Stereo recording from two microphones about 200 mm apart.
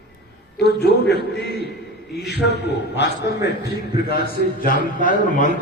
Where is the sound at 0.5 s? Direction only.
55° left (ahead or behind).